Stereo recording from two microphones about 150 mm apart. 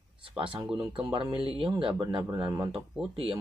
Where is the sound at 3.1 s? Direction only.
40° right (ahead or behind).